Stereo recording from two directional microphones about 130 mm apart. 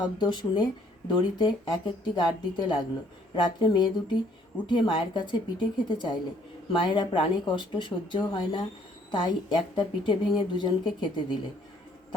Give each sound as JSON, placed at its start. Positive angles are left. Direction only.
{"t": 0.0, "sound": "speech", "side_deg": 35}